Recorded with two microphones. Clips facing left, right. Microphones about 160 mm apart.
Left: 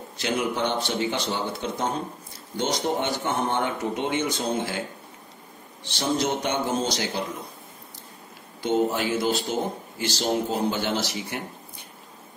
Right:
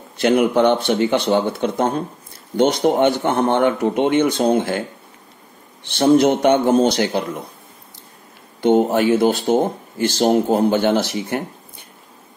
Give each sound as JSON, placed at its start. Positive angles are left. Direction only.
{"t": 0.2, "sound": "speech", "side_deg": -60}
{"t": 5.9, "sound": "speech", "side_deg": -60}
{"t": 8.5, "sound": "speech", "side_deg": -60}